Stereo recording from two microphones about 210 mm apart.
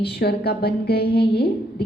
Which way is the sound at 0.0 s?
50° left (ahead or behind).